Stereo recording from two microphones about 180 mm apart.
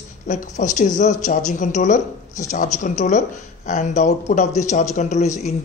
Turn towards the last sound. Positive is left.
turn(degrees=40)  # may be behind; listen again after turning